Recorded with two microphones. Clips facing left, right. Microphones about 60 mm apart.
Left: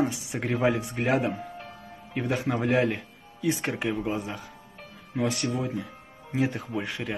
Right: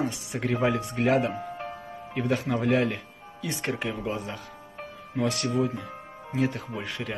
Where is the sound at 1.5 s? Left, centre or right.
Right.